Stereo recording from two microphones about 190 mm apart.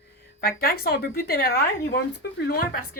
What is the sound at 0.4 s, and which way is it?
A woman's voice, 50° left (ahead or behind).